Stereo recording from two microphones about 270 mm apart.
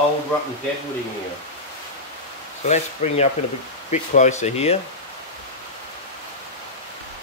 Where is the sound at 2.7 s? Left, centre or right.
Left.